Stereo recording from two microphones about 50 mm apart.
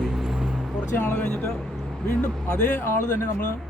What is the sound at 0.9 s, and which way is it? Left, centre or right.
Speech, left.